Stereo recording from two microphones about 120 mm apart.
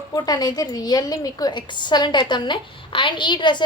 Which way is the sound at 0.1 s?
35° left (ahead or behind).